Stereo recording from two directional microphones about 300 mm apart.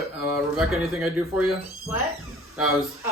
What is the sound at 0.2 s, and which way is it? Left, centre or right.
Speech, centre.